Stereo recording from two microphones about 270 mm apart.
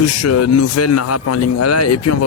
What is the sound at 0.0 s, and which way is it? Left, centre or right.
A man's voice, left.